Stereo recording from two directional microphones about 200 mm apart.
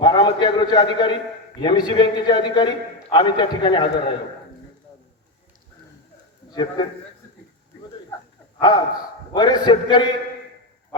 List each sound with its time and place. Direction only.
0.0 s a man's voice: 25° left (ahead or behind)
6.5 s a man's voice: 20° left (ahead or behind)
9.3 s a man's voice: 20° left (ahead or behind)